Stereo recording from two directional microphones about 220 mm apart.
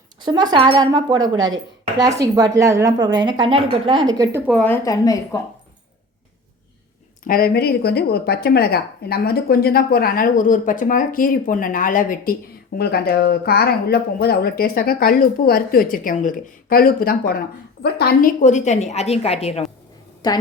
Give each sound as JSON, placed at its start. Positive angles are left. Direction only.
{"t": 0.2, "sound": "a woman's voice", "side_deg": -20}
{"t": 4.5, "sound": "a woman's voice", "side_deg": 10}
{"t": 7.3, "sound": "a woman's voice", "side_deg": 40}
{"t": 20.2, "sound": "a woman's voice", "side_deg": 20}